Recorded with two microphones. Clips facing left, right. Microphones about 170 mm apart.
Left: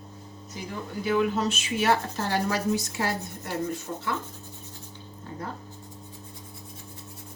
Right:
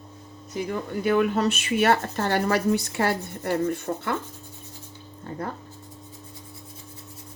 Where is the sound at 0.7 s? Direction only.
60° right (ahead or behind).